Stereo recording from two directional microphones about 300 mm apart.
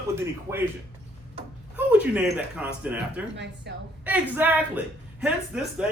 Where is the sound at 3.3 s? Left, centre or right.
Right.